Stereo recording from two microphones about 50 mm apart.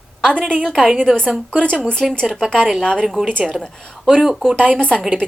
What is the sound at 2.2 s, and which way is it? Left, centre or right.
Speech, centre.